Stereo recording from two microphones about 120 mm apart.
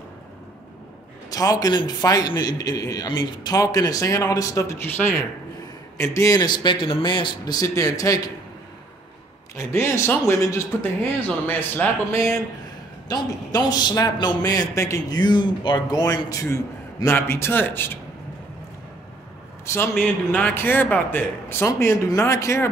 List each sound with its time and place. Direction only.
1.3 s a man's voice: 30° left (ahead or behind)
9.6 s a man's voice: 20° left (ahead or behind)
13.1 s a man's voice: 35° left (ahead or behind); by 17.9 s 15° left (ahead or behind)
19.6 s a man's voice: 20° left (ahead or behind)